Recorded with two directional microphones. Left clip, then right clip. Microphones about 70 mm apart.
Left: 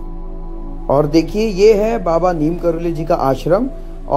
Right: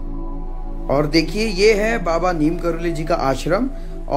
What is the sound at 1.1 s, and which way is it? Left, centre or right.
Speech, left.